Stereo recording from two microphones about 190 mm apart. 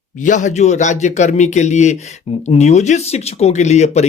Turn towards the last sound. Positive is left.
turn(degrees=35)  # may be behind; listen again after turning